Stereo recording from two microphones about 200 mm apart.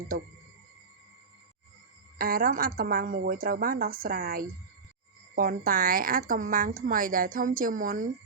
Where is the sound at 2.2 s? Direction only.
45° right (ahead or behind).